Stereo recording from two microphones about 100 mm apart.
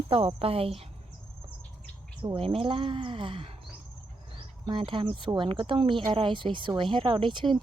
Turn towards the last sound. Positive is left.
turn(degrees=-55)  # may be behind; listen again after turning